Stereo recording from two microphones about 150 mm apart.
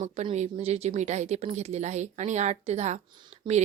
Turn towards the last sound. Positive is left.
turn(degrees=-30)  # may be behind; listen again after turning